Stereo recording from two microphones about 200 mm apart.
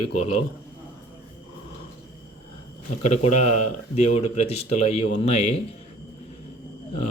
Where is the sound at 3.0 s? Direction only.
35° left (ahead or behind).